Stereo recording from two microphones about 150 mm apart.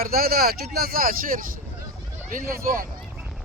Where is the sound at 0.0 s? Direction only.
85° right.